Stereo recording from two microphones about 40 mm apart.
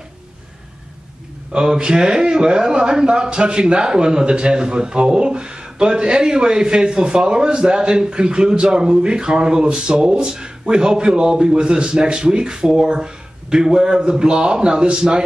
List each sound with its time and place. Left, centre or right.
1.5 s speech: right